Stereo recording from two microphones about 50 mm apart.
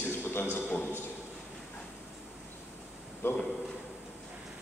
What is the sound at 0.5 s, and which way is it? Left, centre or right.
Speech, left.